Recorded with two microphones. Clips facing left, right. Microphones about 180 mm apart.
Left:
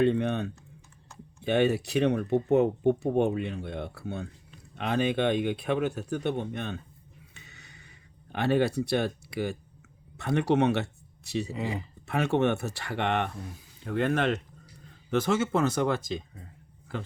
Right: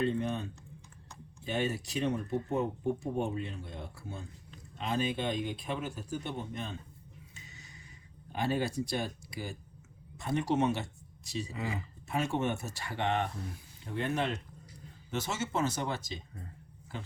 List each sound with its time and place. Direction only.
0.0 s speech: 70° left (ahead or behind)
7.3 s a sound: 65° left (ahead or behind)
8.3 s speech: 65° left (ahead or behind)
11.5 s speech: 20° left (ahead or behind)
12.0 s speech: 65° left (ahead or behind)
13.8 s speech: 80° left
15.3 s speech: 55° left (ahead or behind)